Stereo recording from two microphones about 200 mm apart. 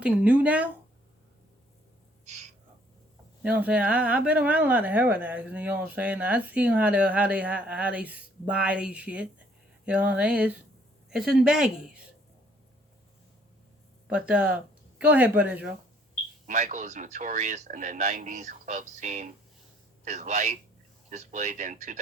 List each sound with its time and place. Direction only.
0.0 s speech: 5° right (ahead or behind)
2.2 s a sound: 35° right (ahead or behind)
3.4 s speech: 5° right (ahead or behind)
14.1 s speech: 5° right (ahead or behind)
16.5 s speech: 40° right (ahead or behind)